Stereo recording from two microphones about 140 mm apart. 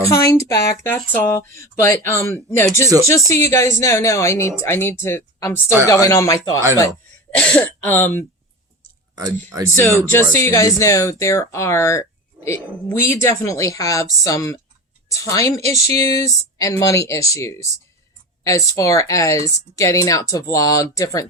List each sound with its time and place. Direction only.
0.1 s speech: 20° left (ahead or behind)
7.3 s speech: 10° left (ahead or behind)
9.1 s speech: 25° right (ahead or behind)
10.0 s a woman's voice: 15° left (ahead or behind)